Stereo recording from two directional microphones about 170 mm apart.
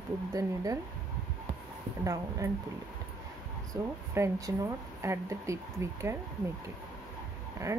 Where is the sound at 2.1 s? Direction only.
20° right (ahead or behind).